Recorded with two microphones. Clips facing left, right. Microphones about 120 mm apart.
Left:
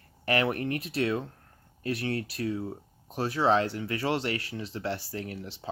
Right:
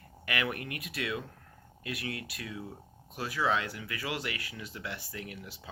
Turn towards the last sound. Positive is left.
turn(degrees=35)  # may be behind; listen again after turning